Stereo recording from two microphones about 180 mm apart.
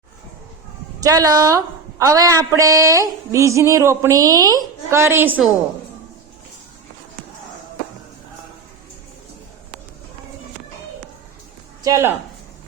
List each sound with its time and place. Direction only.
0.9 s a woman's voice: 20° right (ahead or behind)
11.8 s speech: 15° right (ahead or behind)